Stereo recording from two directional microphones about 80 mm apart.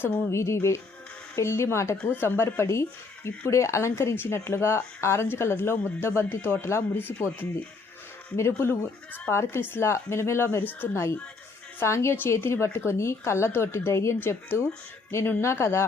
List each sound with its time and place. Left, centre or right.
0.0 s speech: left